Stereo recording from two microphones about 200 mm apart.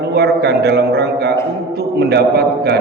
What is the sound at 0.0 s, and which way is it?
A man's voice, 55° right (ahead or behind).